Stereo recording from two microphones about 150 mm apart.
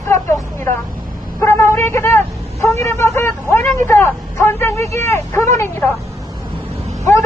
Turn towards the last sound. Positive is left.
turn(degrees=20)  # may be behind; listen again after turning